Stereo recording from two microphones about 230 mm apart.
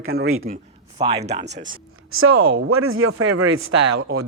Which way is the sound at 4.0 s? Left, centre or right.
Right.